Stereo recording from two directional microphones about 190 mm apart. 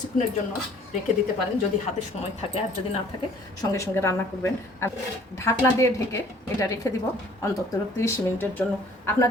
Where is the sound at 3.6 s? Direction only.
15° left (ahead or behind).